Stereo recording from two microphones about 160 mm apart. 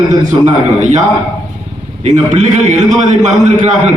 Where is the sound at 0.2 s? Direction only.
50° right (ahead or behind).